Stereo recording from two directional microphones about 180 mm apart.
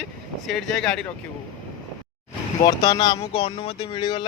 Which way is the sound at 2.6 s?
20° left (ahead or behind).